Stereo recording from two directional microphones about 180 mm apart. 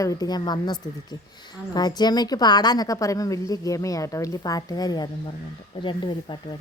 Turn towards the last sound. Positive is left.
turn(degrees=25)  # may be behind; listen again after turning